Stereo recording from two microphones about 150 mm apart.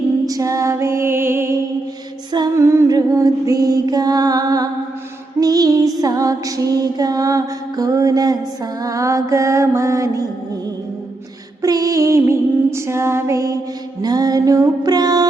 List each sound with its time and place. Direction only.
0.3 s music: 25° right (ahead or behind)
11.6 s music: 25° right (ahead or behind)